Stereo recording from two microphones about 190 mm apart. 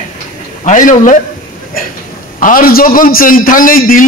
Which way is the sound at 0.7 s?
45° left (ahead or behind).